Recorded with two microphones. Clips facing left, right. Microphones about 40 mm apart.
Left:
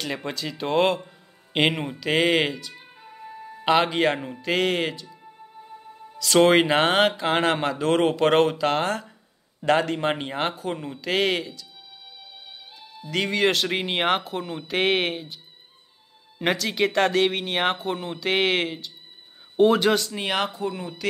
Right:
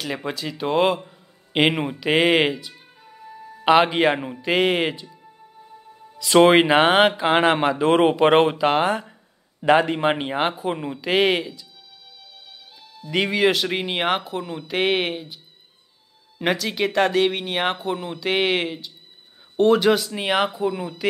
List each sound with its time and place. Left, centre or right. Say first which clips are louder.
0.0 s a man's voice: right 2 dB; centre
2.7 s music: left 2 dB; centre
3.6 s speech: right 4 dB; centre
5.1 s music: left 2 dB; centre
6.1 s speech: right 3 dB; centre
12.8 s music: right 1 dB; centre
13.1 s speech: right 3 dB; centre
13.4 s speech: right 1 dB; centre
16.3 s speech: right 1 dB; centre